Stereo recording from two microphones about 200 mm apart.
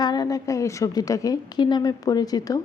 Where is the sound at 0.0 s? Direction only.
20° left (ahead or behind).